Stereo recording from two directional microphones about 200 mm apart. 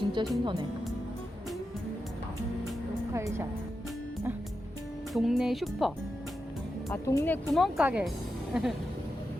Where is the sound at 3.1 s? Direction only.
15° right (ahead or behind).